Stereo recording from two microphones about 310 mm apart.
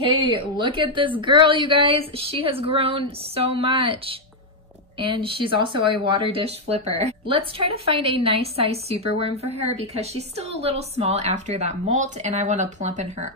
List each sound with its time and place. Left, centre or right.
0.0 s a woman's voice: centre